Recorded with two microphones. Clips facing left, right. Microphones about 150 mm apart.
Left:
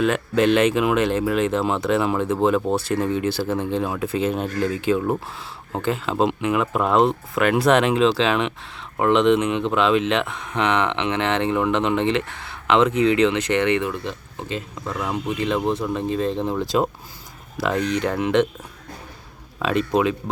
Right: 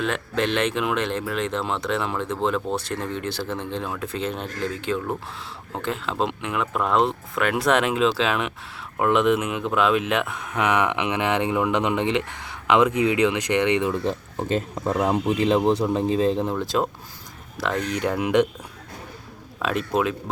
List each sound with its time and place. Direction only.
0.0 s speech: 5° left (ahead or behind); by 13.9 s 15° right (ahead or behind)
13.9 s speech: 40° right (ahead or behind)
16.2 s speech: centre (ahead or behind)
17.9 s speech: 5° right (ahead or behind)
19.5 s speech: centre (ahead or behind)